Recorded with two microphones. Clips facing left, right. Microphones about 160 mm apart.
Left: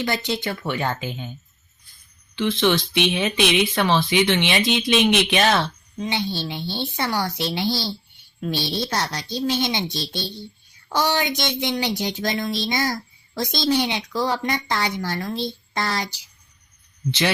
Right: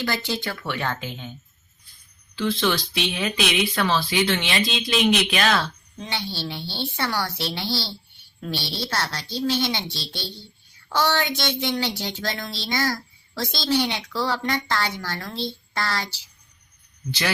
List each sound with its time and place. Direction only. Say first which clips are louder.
0.0 s speech: left 2 dB; 20° left (ahead or behind)
2.3 s a woman's voice: left 3 dB; 20° left (ahead or behind)